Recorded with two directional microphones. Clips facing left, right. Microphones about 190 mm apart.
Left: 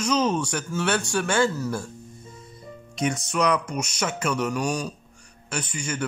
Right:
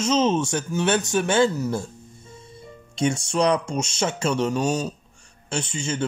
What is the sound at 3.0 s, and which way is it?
Speech, 30° right (ahead or behind).